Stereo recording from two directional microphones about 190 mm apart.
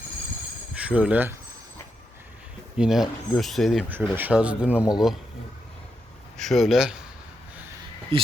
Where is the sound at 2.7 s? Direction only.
5° right (ahead or behind).